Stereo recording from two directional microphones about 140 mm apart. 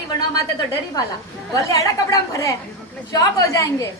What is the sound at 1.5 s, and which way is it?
A woman's voice, 25° left (ahead or behind).